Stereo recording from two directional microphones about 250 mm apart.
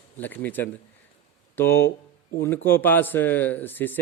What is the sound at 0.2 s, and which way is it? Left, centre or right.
Speech, centre.